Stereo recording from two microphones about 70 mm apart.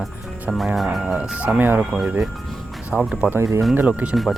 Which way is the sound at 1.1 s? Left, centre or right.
Centre.